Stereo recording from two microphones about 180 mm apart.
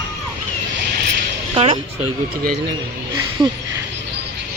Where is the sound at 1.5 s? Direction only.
30° right (ahead or behind).